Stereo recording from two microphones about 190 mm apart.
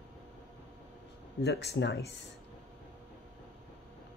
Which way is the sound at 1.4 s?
60° left (ahead or behind).